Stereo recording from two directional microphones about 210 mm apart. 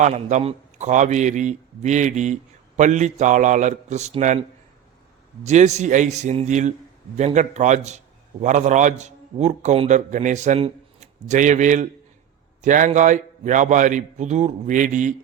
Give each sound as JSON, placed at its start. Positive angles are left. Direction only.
{"t": 0.0, "sound": "a man's voice", "side_deg": -35}